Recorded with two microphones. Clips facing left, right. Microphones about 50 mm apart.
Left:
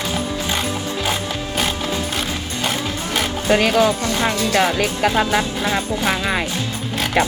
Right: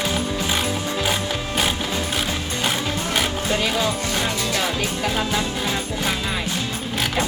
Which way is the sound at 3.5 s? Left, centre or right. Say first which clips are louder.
Left 10 dB; left.